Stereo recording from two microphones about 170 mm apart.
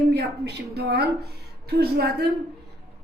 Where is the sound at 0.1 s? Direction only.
80° right.